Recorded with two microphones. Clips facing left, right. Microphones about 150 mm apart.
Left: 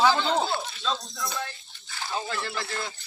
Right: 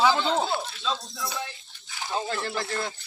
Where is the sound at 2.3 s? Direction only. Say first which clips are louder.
Right 3 dB; 45° right (ahead or behind).